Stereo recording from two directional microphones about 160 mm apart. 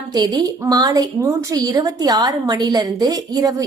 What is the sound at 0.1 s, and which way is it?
A woman's voice, 25° right (ahead or behind).